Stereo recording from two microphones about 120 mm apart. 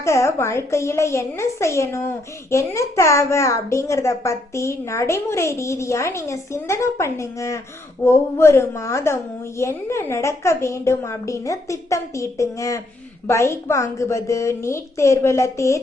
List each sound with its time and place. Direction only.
0.0 s a child's voice: 25° left (ahead or behind)